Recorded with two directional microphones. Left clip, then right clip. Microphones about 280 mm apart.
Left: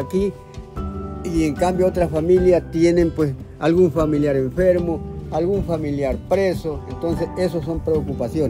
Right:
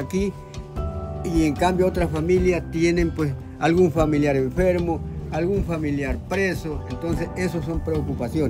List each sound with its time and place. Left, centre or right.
0.0 s speech: centre
1.2 s speech: centre
1.5 s speech: centre